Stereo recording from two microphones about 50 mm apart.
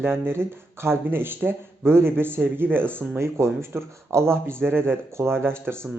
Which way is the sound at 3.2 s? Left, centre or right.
Right.